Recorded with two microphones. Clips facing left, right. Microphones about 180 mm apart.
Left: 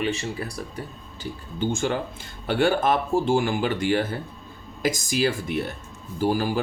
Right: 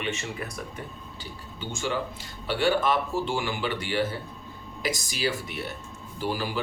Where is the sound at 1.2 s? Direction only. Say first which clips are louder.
Left 12 dB; 50° left (ahead or behind).